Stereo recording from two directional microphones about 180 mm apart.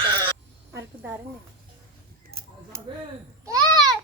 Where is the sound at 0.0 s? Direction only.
25° right (ahead or behind).